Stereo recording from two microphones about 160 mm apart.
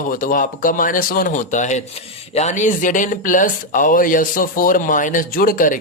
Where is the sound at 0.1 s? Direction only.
60° left (ahead or behind).